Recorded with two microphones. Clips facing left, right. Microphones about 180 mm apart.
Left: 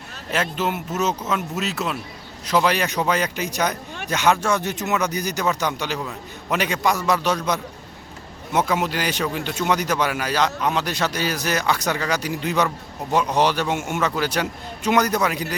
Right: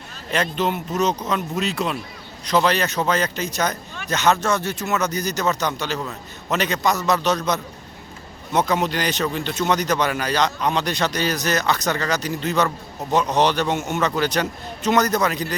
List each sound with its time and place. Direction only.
0.5 s speech: 5° left (ahead or behind)